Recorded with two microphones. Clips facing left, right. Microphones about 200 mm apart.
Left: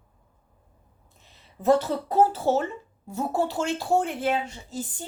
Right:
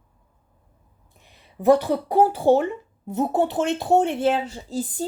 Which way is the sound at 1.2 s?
15° right (ahead or behind).